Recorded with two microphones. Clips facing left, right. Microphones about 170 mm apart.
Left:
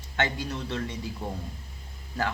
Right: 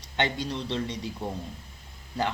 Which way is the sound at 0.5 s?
15° right (ahead or behind).